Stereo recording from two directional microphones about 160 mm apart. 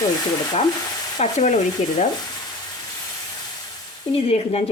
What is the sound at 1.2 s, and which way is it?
Speech, 45° left (ahead or behind).